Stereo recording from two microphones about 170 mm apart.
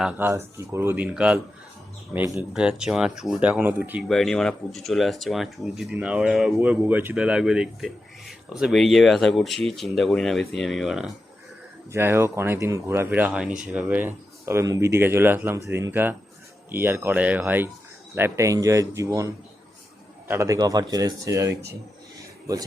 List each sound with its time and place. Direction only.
0.0 s speech: 10° right (ahead or behind)
4.1 s speech: centre (ahead or behind)
11.9 s speech: 15° right (ahead or behind)